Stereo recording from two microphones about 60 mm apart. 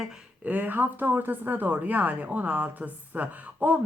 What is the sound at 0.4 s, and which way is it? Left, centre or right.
A woman's voice, right.